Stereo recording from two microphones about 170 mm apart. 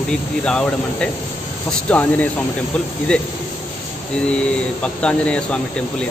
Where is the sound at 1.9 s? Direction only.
10° left (ahead or behind).